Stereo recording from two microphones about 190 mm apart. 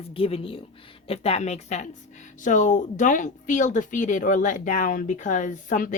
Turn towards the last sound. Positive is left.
turn(degrees=45)  # may be behind; listen again after turning